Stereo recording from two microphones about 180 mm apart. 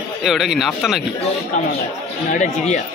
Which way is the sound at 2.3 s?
40° left (ahead or behind).